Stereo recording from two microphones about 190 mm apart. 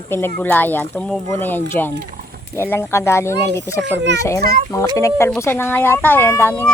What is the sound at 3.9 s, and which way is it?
Speech, 70° right (ahead or behind).